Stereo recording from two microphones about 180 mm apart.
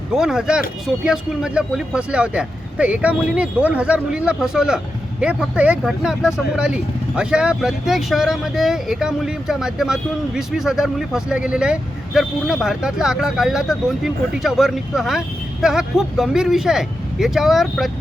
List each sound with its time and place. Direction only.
0.1 s speech: centre (ahead or behind)